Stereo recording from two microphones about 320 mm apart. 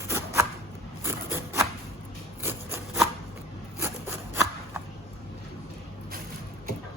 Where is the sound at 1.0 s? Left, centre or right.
Centre.